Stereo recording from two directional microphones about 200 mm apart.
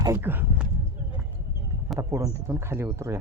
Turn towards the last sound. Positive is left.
turn(degrees=-10)  # may be behind; listen again after turning